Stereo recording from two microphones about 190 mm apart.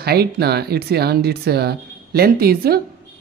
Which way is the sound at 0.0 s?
55° right (ahead or behind).